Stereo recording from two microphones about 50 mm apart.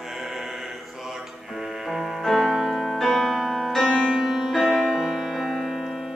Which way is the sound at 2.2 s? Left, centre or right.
Centre.